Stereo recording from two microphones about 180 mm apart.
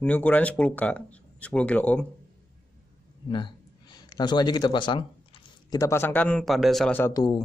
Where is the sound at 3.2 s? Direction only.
25° left (ahead or behind); by 6.9 s centre (ahead or behind).